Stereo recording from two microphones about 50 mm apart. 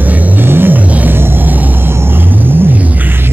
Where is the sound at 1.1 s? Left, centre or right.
Right.